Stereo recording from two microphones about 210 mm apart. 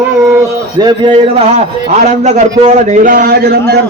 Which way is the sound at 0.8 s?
25° right (ahead or behind).